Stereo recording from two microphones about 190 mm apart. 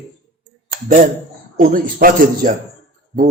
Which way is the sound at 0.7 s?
45° right (ahead or behind).